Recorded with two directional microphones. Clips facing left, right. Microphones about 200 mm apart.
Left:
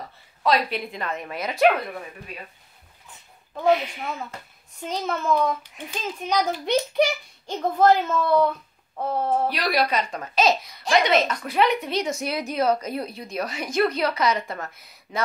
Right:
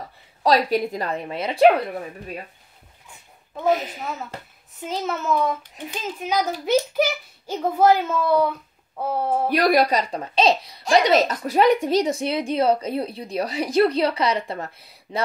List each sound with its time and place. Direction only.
0.4 s a woman's voice: 40° right (ahead or behind)
3.6 s a woman's voice: 40° right (ahead or behind)
4.8 s a child's voice: 5° right (ahead or behind)
9.5 s a woman's voice: 50° right (ahead or behind); by 15.2 s 30° right (ahead or behind)